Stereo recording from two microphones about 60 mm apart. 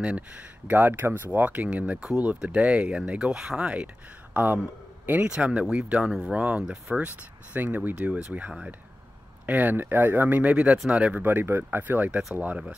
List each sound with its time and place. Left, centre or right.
0.7 s speech: right; by 7.0 s centre
7.1 s speech: right
11.2 s speech: right